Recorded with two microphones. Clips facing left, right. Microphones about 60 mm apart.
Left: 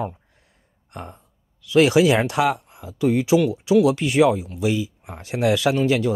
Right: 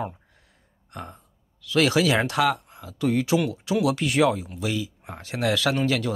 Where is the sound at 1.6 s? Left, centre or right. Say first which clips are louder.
Left 5 dB; centre.